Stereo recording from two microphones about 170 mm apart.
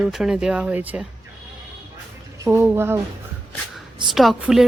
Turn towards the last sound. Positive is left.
turn(degrees=0)  # may be behind; listen again after turning